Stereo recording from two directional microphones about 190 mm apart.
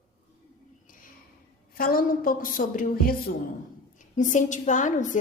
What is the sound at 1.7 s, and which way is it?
A woman's voice, 50° left (ahead or behind).